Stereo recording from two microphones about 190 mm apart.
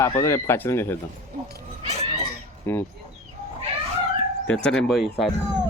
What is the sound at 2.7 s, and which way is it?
Speech, 10° left (ahead or behind).